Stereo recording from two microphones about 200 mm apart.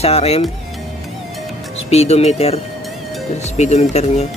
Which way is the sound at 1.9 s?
30° left (ahead or behind).